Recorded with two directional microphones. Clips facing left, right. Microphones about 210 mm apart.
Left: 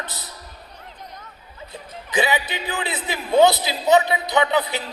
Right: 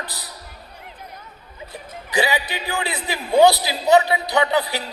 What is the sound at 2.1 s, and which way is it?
A man's voice, 20° left (ahead or behind).